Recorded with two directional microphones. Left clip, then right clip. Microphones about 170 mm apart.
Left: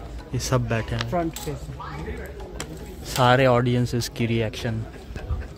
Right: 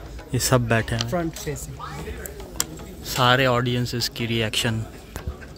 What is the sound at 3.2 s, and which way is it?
Speech, 5° left (ahead or behind).